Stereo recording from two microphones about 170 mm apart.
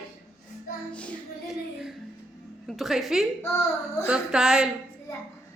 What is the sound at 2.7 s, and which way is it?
A woman's voice, centre (ahead or behind).